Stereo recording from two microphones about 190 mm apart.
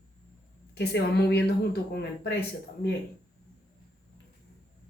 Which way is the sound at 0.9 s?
60° left (ahead or behind).